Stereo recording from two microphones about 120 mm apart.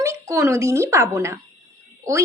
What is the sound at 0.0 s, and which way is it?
A woman's voice, 25° right (ahead or behind).